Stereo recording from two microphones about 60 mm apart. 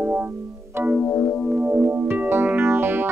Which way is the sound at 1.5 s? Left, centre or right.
Right.